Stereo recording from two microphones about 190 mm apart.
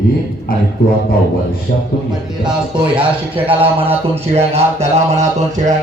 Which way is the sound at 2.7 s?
25° right (ahead or behind).